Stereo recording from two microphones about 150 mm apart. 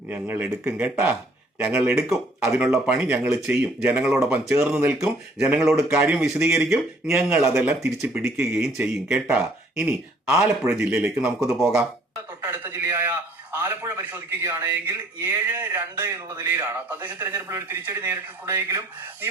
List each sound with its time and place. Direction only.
0.1 s a man's voice: 10° right (ahead or behind)
12.4 s a man's voice: 20° right (ahead or behind)